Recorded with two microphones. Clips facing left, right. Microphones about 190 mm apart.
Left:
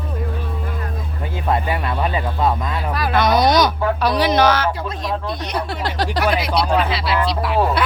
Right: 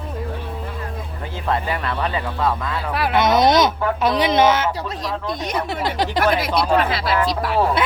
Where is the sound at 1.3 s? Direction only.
15° left (ahead or behind).